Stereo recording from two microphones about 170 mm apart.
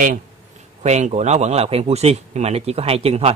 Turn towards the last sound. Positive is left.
turn(degrees=-35)  # may be behind; listen again after turning